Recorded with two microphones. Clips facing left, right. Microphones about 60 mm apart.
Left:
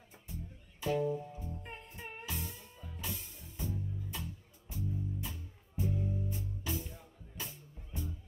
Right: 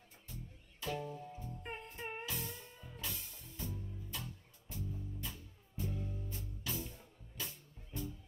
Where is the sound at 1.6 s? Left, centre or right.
Centre.